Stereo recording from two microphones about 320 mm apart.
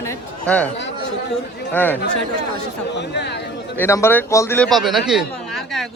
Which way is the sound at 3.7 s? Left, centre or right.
Centre.